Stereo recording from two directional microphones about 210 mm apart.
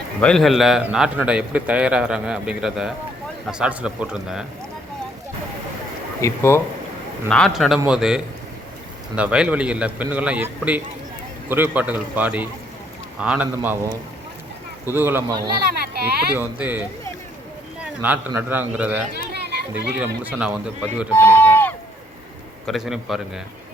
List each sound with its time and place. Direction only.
0.2 s a man's voice: 5° left (ahead or behind)
6.2 s a man's voice: 15° left (ahead or behind); by 15.4 s 10° right (ahead or behind)
15.4 s speech: 45° right (ahead or behind)
16.3 s a man's voice: 10° right (ahead or behind)
18.0 s a man's voice: 10° right (ahead or behind)
19.1 s children playing: 50° right (ahead or behind)
20.0 s a man's voice: 5° right (ahead or behind)
21.1 s a sound: 10° left (ahead or behind)
22.6 s a man's voice: centre (ahead or behind)